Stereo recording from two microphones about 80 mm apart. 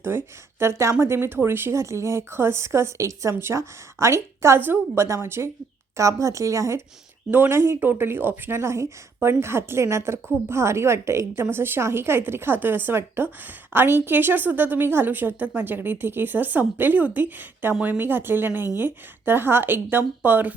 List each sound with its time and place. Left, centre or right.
0.0 s a woman's voice: right
3.3 s a woman's voice: right
7.3 s a woman's voice: right
7.5 s a woman's voice: right